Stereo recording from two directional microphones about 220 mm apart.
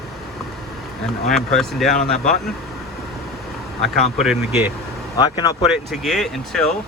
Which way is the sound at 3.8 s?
Centre (ahead or behind).